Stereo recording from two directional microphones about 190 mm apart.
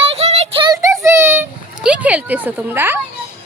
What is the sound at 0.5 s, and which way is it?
Child singing, 25° right (ahead or behind).